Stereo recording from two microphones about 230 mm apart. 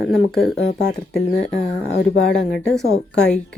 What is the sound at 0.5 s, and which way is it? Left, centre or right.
Speech, left.